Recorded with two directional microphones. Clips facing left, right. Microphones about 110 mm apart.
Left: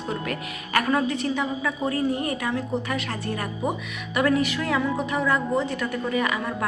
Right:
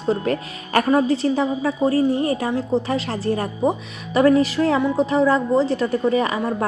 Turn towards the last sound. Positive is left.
turn(degrees=-35)  # may be behind; listen again after turning